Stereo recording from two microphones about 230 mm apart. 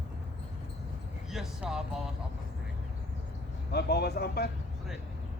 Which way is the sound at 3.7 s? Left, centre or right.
Left.